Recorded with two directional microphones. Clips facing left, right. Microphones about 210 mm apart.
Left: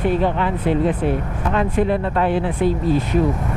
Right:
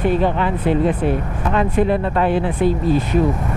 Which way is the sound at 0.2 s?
15° right (ahead or behind).